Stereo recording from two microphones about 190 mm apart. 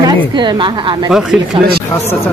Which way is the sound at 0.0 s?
25° right (ahead or behind).